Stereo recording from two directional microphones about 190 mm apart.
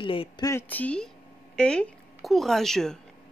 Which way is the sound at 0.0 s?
25° left (ahead or behind).